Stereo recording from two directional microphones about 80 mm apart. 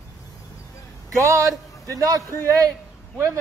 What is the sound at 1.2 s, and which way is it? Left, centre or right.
A man's voice, right.